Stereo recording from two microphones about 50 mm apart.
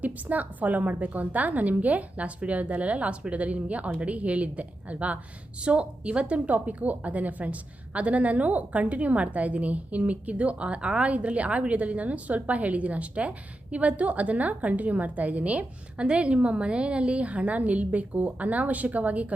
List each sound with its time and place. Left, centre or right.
0.0 s a woman's voice: right